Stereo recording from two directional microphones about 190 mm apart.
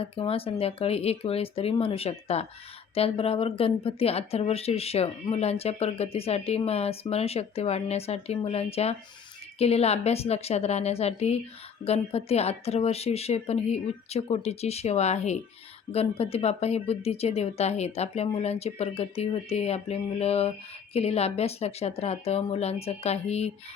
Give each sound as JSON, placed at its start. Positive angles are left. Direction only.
{"t": 0.0, "sound": "speech", "side_deg": 30}